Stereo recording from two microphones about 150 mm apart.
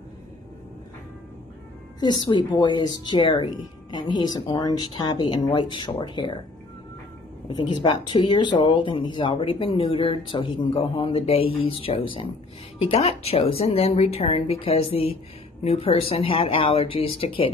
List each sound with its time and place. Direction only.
2.2 s speech: 30° left (ahead or behind)
7.4 s speech: 35° left (ahead or behind)